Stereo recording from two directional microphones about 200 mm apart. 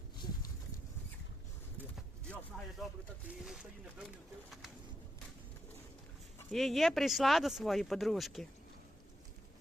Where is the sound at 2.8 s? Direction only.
5° right (ahead or behind).